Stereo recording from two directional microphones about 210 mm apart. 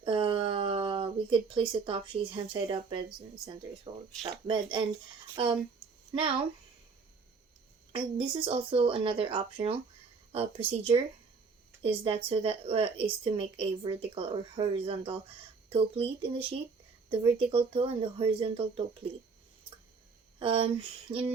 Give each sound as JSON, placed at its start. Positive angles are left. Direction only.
{"t": 0.0, "sound": "a sound", "side_deg": -25}
{"t": 3.9, "sound": "speech", "side_deg": -20}
{"t": 7.9, "sound": "speech", "side_deg": -25}
{"t": 20.4, "sound": "speech", "side_deg": -25}